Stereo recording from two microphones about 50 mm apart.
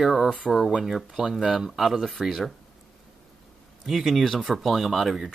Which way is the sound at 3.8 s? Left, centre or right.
Centre.